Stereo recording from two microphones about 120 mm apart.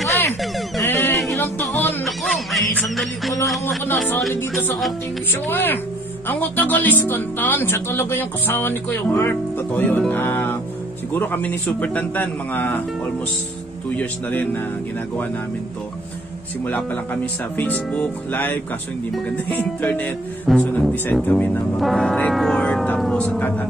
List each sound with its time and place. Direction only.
0.8 s a sound: 20° left (ahead or behind)
1.3 s music: 15° left (ahead or behind)
2.0 s music: centre (ahead or behind)
3.6 s speech: 20° left (ahead or behind)
13.8 s speech: 15° left (ahead or behind)
16.9 s speech: 15° left (ahead or behind)
20.4 s speech: 5° left (ahead or behind)
21.7 s speech: centre (ahead or behind)